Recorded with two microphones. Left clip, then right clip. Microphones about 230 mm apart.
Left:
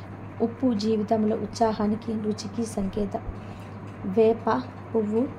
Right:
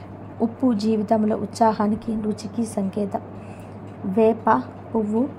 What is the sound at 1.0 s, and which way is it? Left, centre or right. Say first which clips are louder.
A woman's voice: right 4 dB; centre.